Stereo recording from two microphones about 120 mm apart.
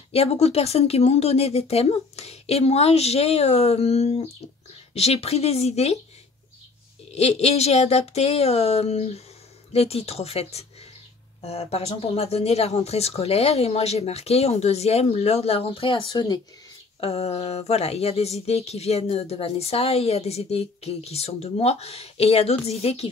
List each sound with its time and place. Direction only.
0.1 s speech: 60° left (ahead or behind)
7.1 s speech: 60° left (ahead or behind)
16.1 s speech: 35° left (ahead or behind)
17.0 s speech: 60° left (ahead or behind)